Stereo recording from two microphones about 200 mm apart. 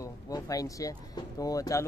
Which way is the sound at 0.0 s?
15° left (ahead or behind).